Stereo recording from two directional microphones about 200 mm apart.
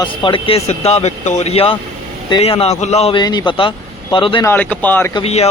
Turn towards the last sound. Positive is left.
turn(degrees=30)  # may be behind; listen again after turning